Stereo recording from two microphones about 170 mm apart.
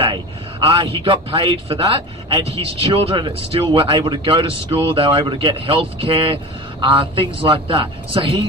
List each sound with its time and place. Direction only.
0.0 s a man's voice: 30° right (ahead or behind)